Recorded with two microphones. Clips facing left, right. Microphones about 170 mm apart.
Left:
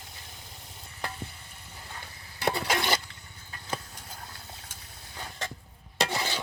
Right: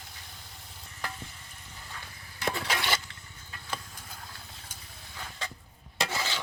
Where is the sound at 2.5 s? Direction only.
45° left (ahead or behind).